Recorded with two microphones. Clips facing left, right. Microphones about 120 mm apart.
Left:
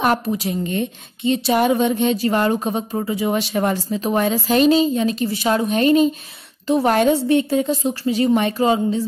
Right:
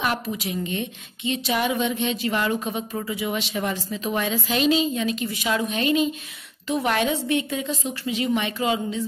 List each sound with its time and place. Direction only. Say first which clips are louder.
0.0 s a woman's voice: left 7 dB; 45° left (ahead or behind)